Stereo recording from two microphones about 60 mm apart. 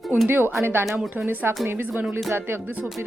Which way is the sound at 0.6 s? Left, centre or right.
Right.